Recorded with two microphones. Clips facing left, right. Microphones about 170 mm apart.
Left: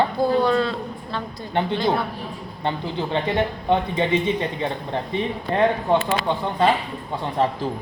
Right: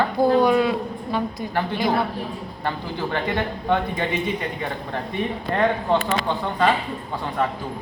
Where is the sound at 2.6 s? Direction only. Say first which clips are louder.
Left 2 dB; 20° left (ahead or behind).